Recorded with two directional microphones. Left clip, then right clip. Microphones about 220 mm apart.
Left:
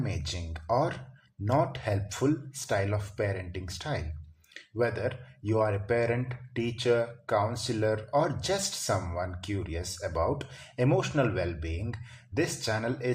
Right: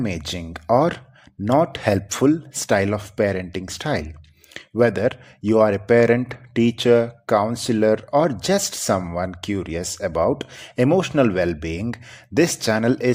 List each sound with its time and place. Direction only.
0.0 s speech: 45° right (ahead or behind)